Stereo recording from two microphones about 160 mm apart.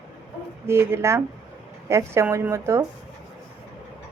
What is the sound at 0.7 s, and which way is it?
A woman's voice, 15° right (ahead or behind).